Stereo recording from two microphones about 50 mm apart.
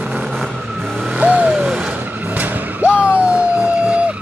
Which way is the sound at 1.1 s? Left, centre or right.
Right.